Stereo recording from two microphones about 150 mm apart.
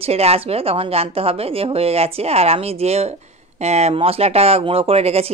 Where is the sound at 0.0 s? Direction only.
45° right (ahead or behind).